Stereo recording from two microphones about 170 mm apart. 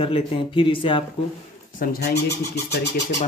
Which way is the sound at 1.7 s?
65° left (ahead or behind).